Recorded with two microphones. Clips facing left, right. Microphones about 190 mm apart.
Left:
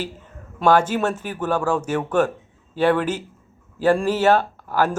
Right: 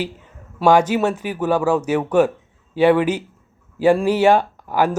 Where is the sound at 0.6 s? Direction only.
10° right (ahead or behind).